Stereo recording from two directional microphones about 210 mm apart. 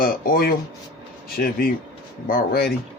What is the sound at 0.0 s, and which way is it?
Speech, 45° left (ahead or behind).